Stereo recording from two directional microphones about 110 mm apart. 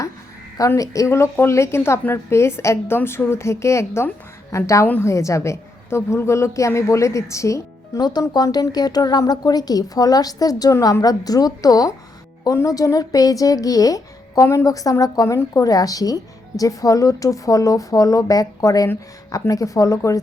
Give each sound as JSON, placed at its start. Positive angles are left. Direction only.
{"t": 0.8, "sound": "a woman's voice", "side_deg": 30}